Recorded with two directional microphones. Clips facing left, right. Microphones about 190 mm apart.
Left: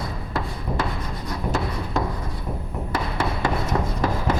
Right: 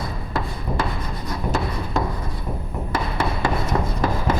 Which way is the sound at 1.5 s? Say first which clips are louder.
Right 1 dB; 25° right (ahead or behind).